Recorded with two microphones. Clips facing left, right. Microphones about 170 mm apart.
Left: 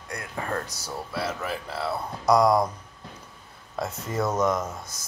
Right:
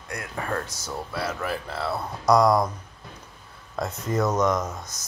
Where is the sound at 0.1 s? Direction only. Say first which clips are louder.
Right 1 dB; 25° left (ahead or behind).